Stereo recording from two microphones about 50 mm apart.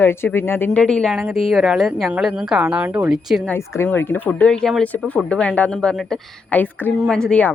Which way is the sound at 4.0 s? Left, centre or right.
Left.